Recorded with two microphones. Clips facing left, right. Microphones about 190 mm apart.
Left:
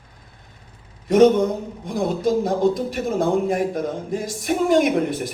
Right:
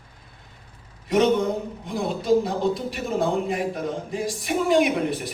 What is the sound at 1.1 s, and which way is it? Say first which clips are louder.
Speech: left 5 dB; 45° left (ahead or behind).